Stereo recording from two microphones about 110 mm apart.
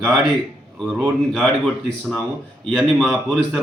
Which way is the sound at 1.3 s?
5° left (ahead or behind).